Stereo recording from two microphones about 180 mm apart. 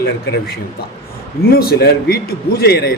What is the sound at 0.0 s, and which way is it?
A man's voice, 65° left (ahead or behind).